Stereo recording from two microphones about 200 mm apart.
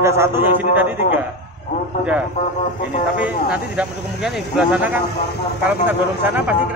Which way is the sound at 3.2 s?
5° right (ahead or behind).